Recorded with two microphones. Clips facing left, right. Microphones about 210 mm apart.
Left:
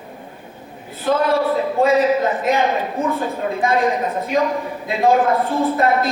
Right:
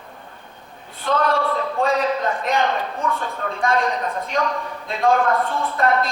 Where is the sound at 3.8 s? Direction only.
20° left (ahead or behind).